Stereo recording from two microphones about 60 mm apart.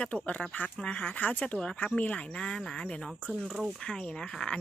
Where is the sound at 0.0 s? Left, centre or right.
Left.